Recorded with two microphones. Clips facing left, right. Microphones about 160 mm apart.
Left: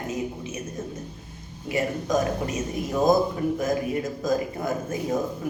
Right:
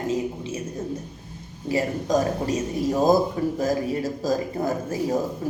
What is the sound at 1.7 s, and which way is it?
Speech, 30° right (ahead or behind).